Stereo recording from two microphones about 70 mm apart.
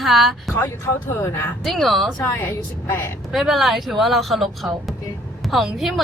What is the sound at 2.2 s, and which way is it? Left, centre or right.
Speech, left.